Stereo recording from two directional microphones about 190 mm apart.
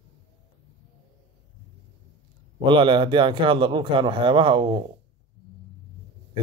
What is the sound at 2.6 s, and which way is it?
Speech, 25° right (ahead or behind).